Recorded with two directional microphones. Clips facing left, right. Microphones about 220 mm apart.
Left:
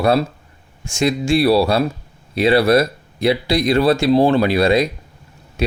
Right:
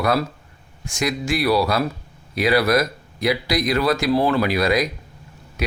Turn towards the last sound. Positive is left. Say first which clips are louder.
# left 4 dB
turn(degrees=30)  # may be behind; listen again after turning